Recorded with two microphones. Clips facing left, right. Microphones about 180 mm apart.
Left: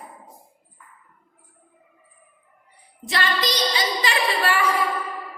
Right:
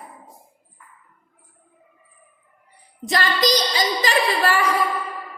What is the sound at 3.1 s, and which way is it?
A woman's voice, 40° right (ahead or behind).